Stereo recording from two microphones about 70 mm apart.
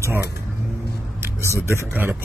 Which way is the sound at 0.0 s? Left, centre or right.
Right.